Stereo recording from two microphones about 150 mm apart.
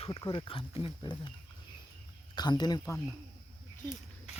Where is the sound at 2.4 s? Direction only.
30° left (ahead or behind).